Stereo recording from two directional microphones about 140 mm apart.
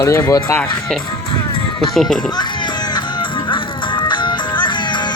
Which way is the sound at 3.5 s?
35° left (ahead or behind).